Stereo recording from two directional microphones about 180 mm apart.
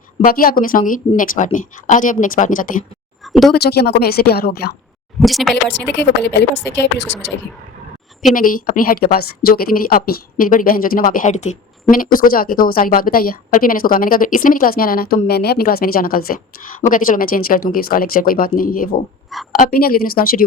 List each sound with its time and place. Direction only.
0.3 s a woman's voice: 55° left (ahead or behind)
3.5 s a woman's voice: 65° left (ahead or behind)
5.2 s speech: centre (ahead or behind)
6.0 s speech: 75° left (ahead or behind)
8.2 s a woman's voice: 45° left (ahead or behind)